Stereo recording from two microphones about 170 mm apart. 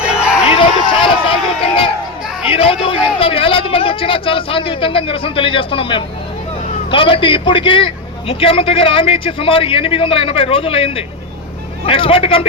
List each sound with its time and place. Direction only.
0.6 s run: 30° left (ahead or behind)
2.5 s a man's voice: 35° left (ahead or behind)